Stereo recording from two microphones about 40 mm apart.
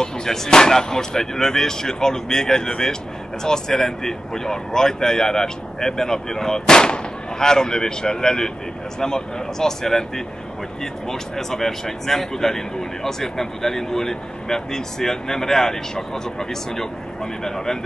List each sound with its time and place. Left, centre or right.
0.0 s speech: centre